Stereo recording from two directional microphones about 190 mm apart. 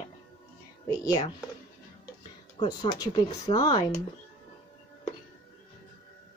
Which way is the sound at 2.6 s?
20° left (ahead or behind).